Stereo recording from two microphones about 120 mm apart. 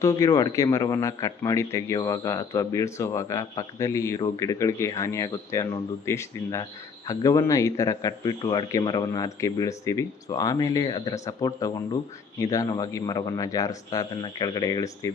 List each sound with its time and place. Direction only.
0.0 s a man's voice: 30° left (ahead or behind)